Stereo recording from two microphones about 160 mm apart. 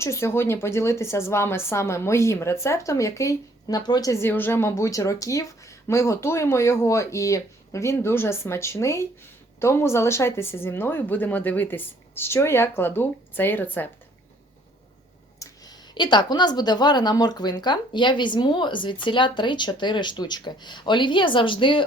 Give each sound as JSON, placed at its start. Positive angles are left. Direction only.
{"t": 0.0, "sound": "speech", "side_deg": 15}
{"t": 15.4, "sound": "speech", "side_deg": 25}